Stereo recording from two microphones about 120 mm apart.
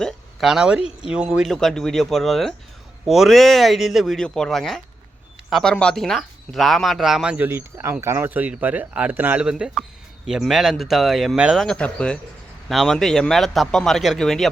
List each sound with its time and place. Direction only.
0.0 s speech: centre (ahead or behind)
7.3 s speech: 20° right (ahead or behind)
11.6 s speech: 10° left (ahead or behind)